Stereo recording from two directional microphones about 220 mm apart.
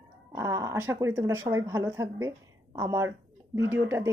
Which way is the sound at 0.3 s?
15° right (ahead or behind).